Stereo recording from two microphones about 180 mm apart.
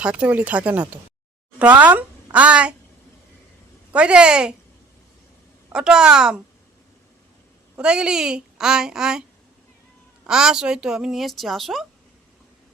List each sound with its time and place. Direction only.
0.0 s speech: 5° right (ahead or behind)
3.9 s a woman's voice: 5° right (ahead or behind)
5.6 s a woman's voice: 5° right (ahead or behind)
7.8 s a woman's voice: 5° right (ahead or behind)
10.2 s a woman's voice: 5° right (ahead or behind)